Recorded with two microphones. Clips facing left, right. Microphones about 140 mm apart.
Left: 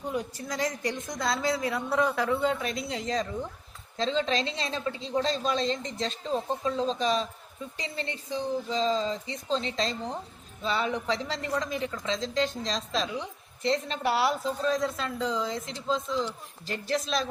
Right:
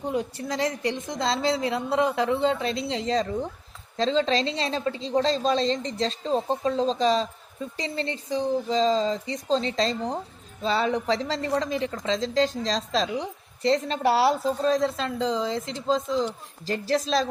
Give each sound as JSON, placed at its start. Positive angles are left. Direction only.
{"t": 0.0, "sound": "a woman's voice", "side_deg": -25}